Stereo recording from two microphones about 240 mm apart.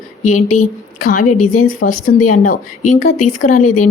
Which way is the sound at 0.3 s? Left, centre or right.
Left.